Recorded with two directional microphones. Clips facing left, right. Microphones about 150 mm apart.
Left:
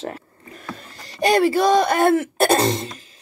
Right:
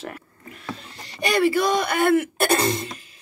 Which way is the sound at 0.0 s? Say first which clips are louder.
Left 4 dB; 30° left (ahead or behind).